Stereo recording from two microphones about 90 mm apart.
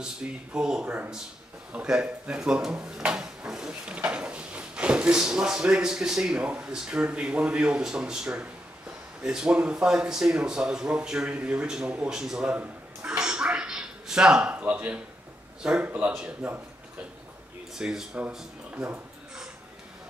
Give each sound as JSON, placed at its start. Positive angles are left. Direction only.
{"t": 0.0, "sound": "speech", "side_deg": -10}
{"t": 17.7, "sound": "speech", "side_deg": -5}